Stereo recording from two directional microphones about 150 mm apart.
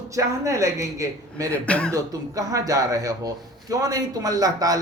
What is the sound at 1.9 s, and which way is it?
Speech, 25° right (ahead or behind).